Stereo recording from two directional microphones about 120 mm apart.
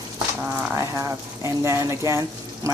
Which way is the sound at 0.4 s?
20° right (ahead or behind).